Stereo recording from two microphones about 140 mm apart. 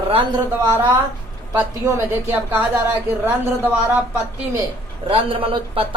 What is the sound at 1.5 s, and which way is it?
A woman's voice, 15° right (ahead or behind).